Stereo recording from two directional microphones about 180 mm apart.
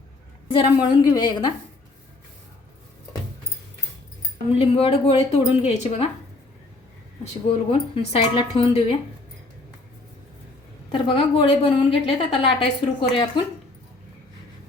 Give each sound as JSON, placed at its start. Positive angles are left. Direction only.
{"t": 0.5, "sound": "a woman's voice", "side_deg": 25}
{"t": 4.5, "sound": "a woman's voice", "side_deg": 30}
{"t": 7.7, "sound": "a woman's voice", "side_deg": 30}
{"t": 11.1, "sound": "a woman's voice", "side_deg": 30}